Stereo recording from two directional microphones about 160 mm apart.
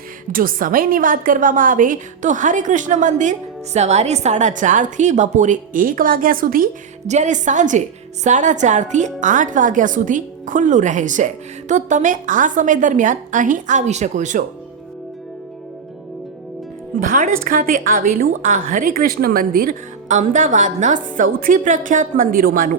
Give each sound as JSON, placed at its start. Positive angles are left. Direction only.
{"t": 0.3, "sound": "a woman's voice", "side_deg": -60}
{"t": 7.1, "sound": "a woman's voice", "side_deg": -50}
{"t": 17.0, "sound": "a woman's voice", "side_deg": -55}